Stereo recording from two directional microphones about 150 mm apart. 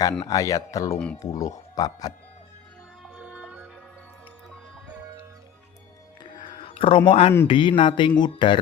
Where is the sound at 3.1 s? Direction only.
10° right (ahead or behind).